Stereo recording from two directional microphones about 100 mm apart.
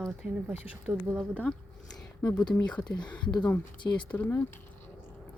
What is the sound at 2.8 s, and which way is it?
Speech, 45° left (ahead or behind).